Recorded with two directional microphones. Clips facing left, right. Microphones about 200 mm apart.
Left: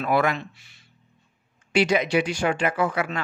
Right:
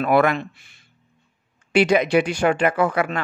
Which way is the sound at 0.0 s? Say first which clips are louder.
Right 5 dB; 60° right (ahead or behind).